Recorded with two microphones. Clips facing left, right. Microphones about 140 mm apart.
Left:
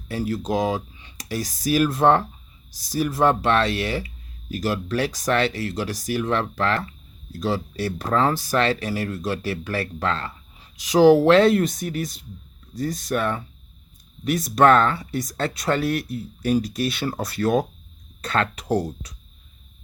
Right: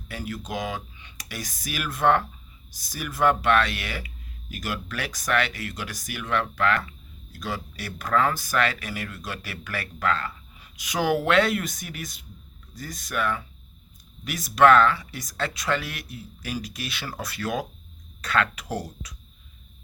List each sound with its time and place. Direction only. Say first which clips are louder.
0.1 s speech: left 8 dB; 35° left (ahead or behind)